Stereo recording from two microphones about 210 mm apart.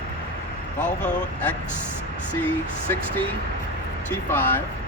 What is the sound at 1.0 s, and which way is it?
Speech, 5° left (ahead or behind).